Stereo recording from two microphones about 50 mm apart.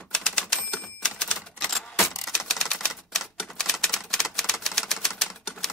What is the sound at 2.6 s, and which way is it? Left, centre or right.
Typewriter, centre.